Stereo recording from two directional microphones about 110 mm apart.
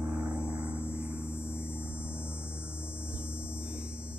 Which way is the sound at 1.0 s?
10° right (ahead or behind).